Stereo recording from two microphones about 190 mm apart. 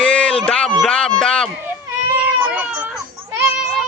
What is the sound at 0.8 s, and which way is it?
Speech, 5° left (ahead or behind).